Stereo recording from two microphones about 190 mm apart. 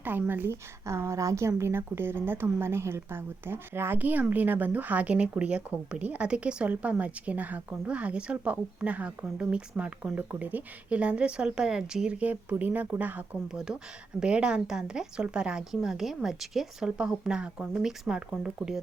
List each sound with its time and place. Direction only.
0.0 s a woman's voice: 10° right (ahead or behind)